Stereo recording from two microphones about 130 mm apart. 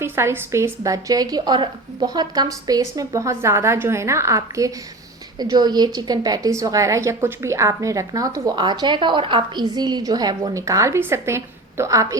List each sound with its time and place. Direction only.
0.0 s a woman's voice: 20° right (ahead or behind)